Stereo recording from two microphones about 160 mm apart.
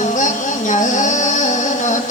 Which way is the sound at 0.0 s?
50° left (ahead or behind).